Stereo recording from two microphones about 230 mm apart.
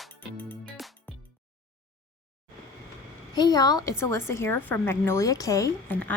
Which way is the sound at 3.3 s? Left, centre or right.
Centre.